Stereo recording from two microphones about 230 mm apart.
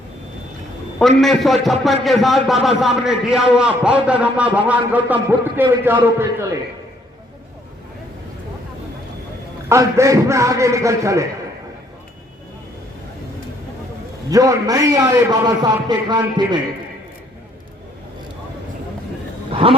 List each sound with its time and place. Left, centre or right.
0.9 s a man's voice: centre
9.6 s a man's voice: centre
14.3 s a man's voice: centre
19.5 s vehicle: right